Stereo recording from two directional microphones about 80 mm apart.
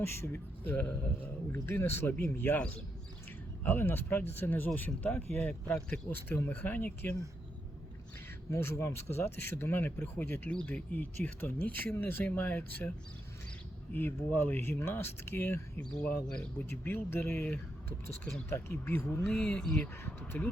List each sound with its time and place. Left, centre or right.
0.0 s speech: left
3.6 s speech: left
8.4 s speech: left
13.9 s speech: left
16.2 s speech: centre
16.6 s speech: left
19.2 s speech: centre
19.8 s speech: left